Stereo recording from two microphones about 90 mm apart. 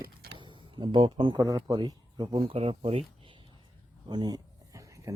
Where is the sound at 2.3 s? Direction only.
80° right.